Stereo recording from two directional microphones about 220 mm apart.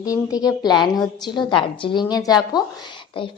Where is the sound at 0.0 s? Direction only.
15° left (ahead or behind).